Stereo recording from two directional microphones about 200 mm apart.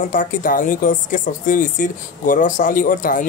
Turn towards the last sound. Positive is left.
turn(degrees=45)  # may be behind; listen again after turning